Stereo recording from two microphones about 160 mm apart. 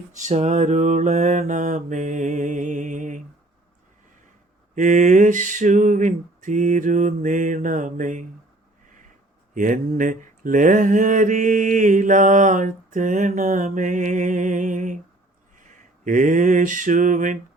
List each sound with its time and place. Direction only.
0.2 s mantra: 45° right (ahead or behind)
4.7 s mantra: 50° right (ahead or behind)
9.6 s mantra: 55° right (ahead or behind)